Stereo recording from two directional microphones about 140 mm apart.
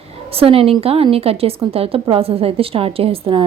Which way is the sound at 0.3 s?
45° right (ahead or behind).